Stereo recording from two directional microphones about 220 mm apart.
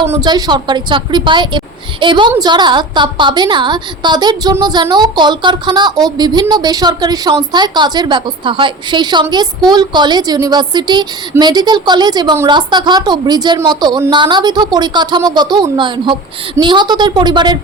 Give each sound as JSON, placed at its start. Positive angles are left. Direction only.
{"t": 0.1, "sound": "a woman's voice", "side_deg": -15}